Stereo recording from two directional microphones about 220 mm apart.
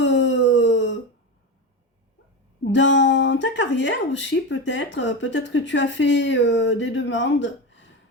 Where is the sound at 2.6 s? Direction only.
55° left (ahead or behind).